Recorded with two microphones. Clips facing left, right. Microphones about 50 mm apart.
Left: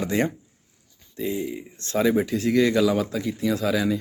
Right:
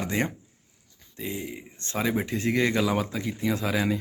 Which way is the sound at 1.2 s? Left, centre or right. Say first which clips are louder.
Left 6 dB; centre.